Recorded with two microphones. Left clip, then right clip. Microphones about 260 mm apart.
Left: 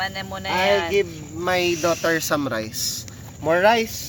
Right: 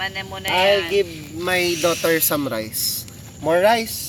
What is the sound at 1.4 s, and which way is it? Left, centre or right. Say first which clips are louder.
Speech: right 1 dB; centre.